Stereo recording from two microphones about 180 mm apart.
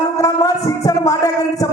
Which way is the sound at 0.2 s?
20° left (ahead or behind).